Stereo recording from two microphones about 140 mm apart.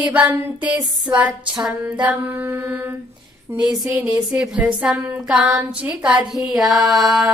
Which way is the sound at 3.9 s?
10° right (ahead or behind).